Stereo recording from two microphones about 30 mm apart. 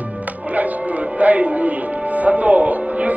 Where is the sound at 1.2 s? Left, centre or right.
Right.